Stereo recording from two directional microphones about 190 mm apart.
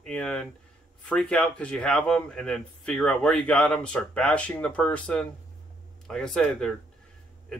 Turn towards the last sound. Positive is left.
turn(degrees=0)  # may be behind; listen again after turning